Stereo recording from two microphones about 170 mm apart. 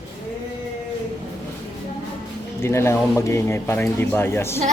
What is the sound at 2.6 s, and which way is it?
Speech, 15° left (ahead or behind).